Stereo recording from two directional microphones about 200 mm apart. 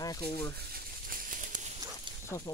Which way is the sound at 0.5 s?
50° right (ahead or behind).